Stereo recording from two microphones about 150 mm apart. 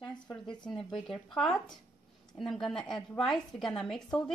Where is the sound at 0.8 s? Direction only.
5° left (ahead or behind).